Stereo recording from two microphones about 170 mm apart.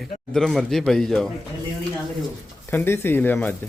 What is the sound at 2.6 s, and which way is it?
Speech, 15° left (ahead or behind).